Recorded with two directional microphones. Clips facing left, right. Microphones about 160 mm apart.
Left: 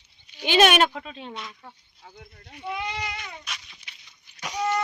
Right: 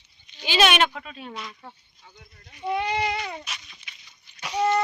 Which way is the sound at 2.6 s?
35° right (ahead or behind).